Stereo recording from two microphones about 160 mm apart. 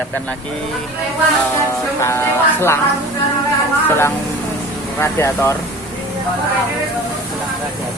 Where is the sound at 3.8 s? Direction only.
15° left (ahead or behind).